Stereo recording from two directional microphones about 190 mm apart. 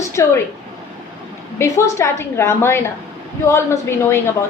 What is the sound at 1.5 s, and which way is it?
A woman's voice, 15° left (ahead or behind).